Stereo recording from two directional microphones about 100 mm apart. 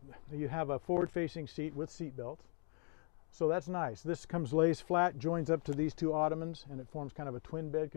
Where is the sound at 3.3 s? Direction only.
10° right (ahead or behind).